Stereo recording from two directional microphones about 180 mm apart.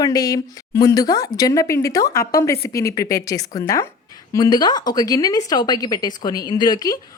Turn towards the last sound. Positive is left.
turn(degrees=20)  # may be behind; listen again after turning